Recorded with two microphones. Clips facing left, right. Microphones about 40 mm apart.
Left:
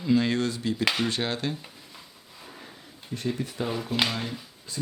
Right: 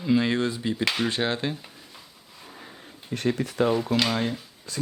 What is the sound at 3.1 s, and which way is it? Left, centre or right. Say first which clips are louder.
Speech: right 4 dB; right.